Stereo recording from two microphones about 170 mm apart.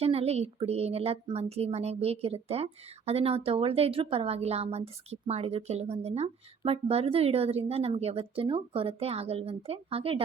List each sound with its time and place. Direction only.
0.0 s a woman's voice: 35° right (ahead or behind)